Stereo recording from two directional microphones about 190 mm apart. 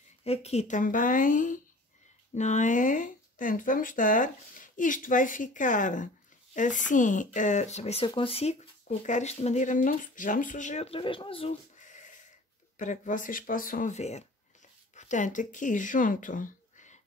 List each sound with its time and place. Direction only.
0.2 s speech: 35° left (ahead or behind)